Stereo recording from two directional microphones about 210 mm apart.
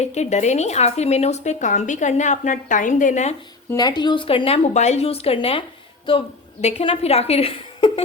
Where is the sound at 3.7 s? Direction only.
20° left (ahead or behind).